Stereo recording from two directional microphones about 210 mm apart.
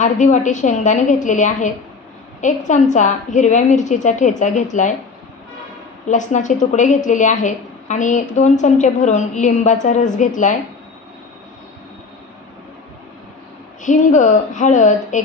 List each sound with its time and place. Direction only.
0.0 s a woman's voice: 35° left (ahead or behind)
6.0 s a woman's voice: 35° left (ahead or behind)
13.8 s a woman's voice: 35° left (ahead or behind)